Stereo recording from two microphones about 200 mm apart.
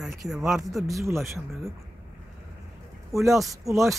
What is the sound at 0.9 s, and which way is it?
Speech, 15° right (ahead or behind).